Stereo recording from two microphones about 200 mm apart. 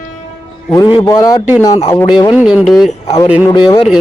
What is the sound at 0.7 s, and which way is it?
A man's voice, 20° left (ahead or behind).